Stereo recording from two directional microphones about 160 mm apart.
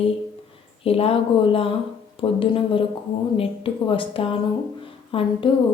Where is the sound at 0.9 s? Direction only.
35° left (ahead or behind).